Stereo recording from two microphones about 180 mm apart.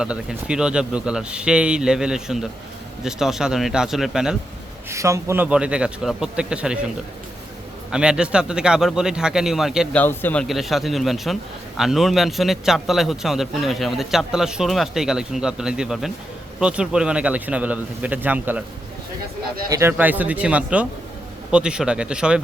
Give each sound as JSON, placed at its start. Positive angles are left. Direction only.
{"t": 0.0, "sound": "a man's voice", "side_deg": -5}
{"t": 4.9, "sound": "a man's voice", "side_deg": -15}
{"t": 7.9, "sound": "a man's voice", "side_deg": -5}
{"t": 10.0, "sound": "speech", "side_deg": 10}
{"t": 10.4, "sound": "a man's voice", "side_deg": 0}
{"t": 19.7, "sound": "a man's voice", "side_deg": -10}